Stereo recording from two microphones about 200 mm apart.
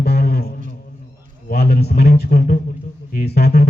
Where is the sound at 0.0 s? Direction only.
50° left (ahead or behind).